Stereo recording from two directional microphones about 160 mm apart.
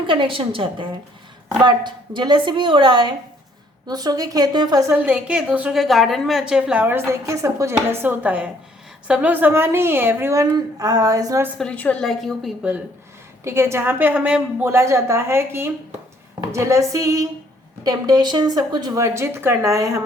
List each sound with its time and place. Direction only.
0.1 s a woman's voice: 30° right (ahead or behind)
4.9 s a woman's voice: 10° right (ahead or behind)
11.5 s a woman's voice: 5° left (ahead or behind)
13.4 s a woman's voice: 15° right (ahead or behind)